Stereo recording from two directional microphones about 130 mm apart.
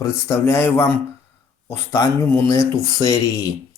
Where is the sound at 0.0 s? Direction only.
25° left (ahead or behind).